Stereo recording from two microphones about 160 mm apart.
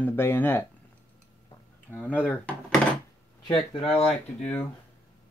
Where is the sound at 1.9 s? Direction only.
10° left (ahead or behind).